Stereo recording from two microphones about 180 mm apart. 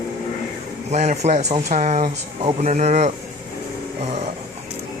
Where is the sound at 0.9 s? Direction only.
40° right (ahead or behind).